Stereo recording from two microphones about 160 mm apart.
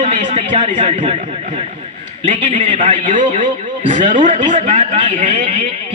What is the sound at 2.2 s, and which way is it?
A man's voice, 50° right (ahead or behind).